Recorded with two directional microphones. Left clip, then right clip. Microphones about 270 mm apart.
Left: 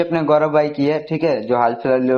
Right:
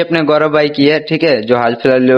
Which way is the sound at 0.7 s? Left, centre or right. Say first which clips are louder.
Right 7 dB; right.